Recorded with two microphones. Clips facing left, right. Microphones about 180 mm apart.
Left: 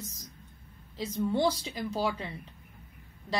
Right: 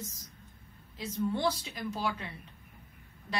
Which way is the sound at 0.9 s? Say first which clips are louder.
Left 3 dB; 30° left (ahead or behind).